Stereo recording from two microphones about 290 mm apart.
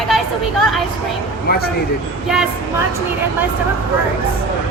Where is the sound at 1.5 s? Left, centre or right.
Left.